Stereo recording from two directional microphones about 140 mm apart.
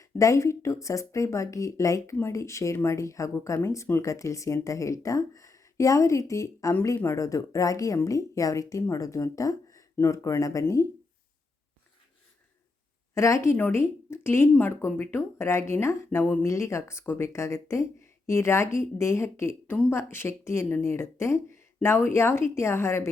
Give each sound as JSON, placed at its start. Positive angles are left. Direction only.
{"t": 0.0, "sound": "speech", "side_deg": 20}
{"t": 13.1, "sound": "speech", "side_deg": 20}